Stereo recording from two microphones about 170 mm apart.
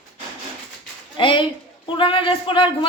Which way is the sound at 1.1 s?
30° left (ahead or behind).